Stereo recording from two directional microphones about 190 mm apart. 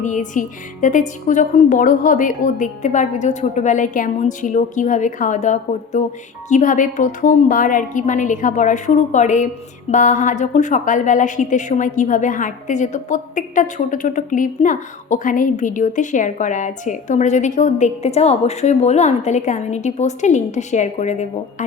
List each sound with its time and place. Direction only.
0.0 s a woman's voice: 40° left (ahead or behind)